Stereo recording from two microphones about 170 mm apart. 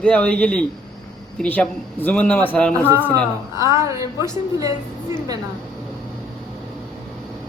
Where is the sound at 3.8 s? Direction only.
15° right (ahead or behind).